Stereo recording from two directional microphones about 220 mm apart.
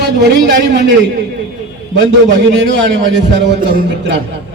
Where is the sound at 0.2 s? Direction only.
55° right (ahead or behind).